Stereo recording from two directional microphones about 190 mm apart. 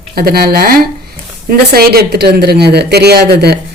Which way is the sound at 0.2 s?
55° right (ahead or behind).